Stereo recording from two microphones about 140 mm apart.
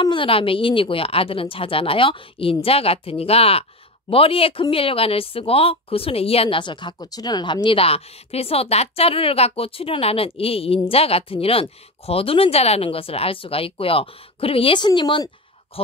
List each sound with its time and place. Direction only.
0.0 s speech: 35° left (ahead or behind)